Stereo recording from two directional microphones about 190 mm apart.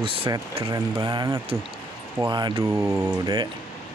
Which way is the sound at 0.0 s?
30° right (ahead or behind).